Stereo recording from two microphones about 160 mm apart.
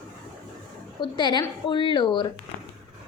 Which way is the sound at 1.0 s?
30° left (ahead or behind).